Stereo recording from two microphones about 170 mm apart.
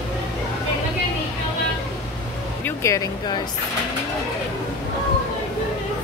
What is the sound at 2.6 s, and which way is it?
Speech, 15° left (ahead or behind).